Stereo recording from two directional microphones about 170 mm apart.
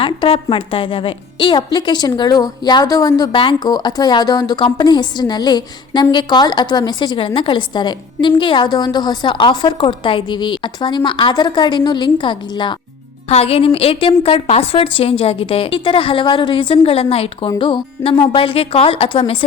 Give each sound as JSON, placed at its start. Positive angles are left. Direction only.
{"t": 0.0, "sound": "a woman's voice", "side_deg": 30}